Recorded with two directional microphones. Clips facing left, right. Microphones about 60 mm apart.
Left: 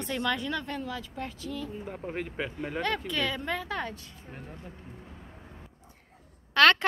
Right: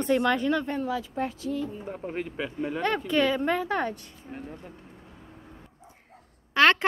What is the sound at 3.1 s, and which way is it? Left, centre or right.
Speech, right.